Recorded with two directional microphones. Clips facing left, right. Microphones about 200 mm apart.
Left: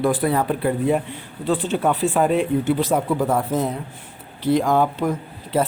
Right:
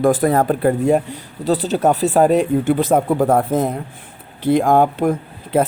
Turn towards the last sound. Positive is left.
turn(degrees=-50)  # may be behind; listen again after turning